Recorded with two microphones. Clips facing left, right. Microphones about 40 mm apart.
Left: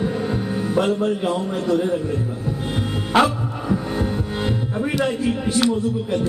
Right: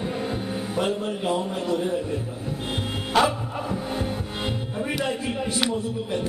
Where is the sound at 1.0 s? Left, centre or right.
Centre.